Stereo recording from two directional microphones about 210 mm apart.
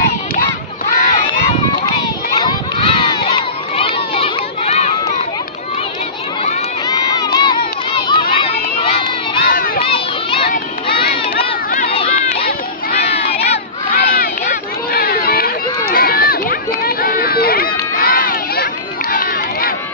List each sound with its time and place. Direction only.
0.9 s a sound: 35° left (ahead or behind)
7.3 s crowd: 20° left (ahead or behind)
9.5 s crowd: 45° left (ahead or behind)
9.8 s crowd: 25° left (ahead or behind)
10.5 s a sound: 45° left (ahead or behind)
11.9 s run: 25° left (ahead or behind)
12.4 s a sound: 45° left (ahead or behind)
13.1 s crowd: 25° left (ahead or behind)
13.9 s run: 45° left (ahead or behind)